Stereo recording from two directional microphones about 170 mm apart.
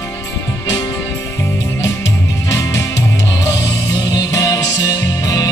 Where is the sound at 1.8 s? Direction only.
15° left (ahead or behind).